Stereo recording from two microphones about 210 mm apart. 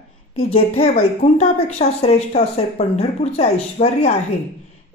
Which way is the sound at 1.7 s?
30° left (ahead or behind).